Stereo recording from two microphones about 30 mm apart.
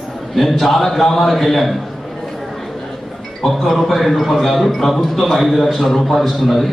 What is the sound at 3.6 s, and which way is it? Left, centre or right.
A man's voice, centre.